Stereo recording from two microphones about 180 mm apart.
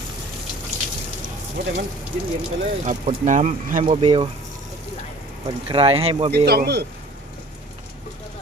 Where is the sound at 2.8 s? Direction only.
45° right (ahead or behind).